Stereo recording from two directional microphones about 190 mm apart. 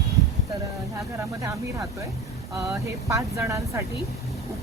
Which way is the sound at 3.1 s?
15° right (ahead or behind).